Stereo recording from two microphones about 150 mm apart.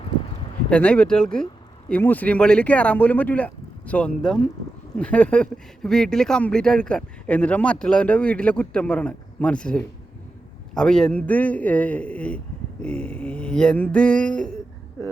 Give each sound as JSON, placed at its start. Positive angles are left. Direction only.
{"t": 0.7, "sound": "speech", "side_deg": 10}